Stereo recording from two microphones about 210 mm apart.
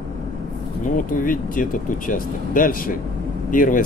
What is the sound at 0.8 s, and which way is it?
Speech, 40° left (ahead or behind).